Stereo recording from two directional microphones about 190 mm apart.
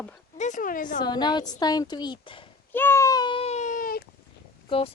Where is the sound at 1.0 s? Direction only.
20° left (ahead or behind).